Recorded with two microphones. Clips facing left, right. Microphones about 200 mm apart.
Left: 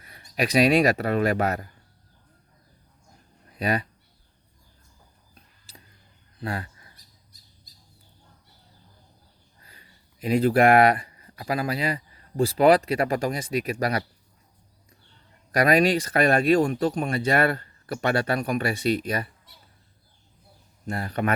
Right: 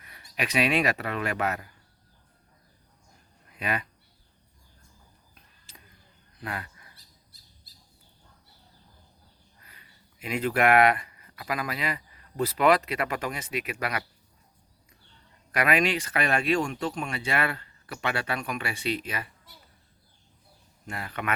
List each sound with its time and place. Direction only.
0.0 s speech: 35° left (ahead or behind)
3.5 s speech: 40° left (ahead or behind)
5.3 s a sound: 35° left (ahead or behind)
9.6 s speech: 30° left (ahead or behind)
15.5 s speech: 40° left (ahead or behind)
20.8 s speech: 40° left (ahead or behind)